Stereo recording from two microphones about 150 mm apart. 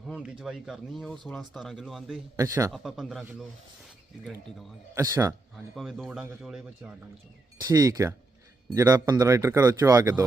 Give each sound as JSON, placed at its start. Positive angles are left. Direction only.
{"t": 0.0, "sound": "speech", "side_deg": -5}
{"t": 2.3, "sound": "speech", "side_deg": -20}
{"t": 2.7, "sound": "speech", "side_deg": 0}
{"t": 4.9, "sound": "speech", "side_deg": -25}
{"t": 5.5, "sound": "speech", "side_deg": 0}
{"t": 7.6, "sound": "speech", "side_deg": -25}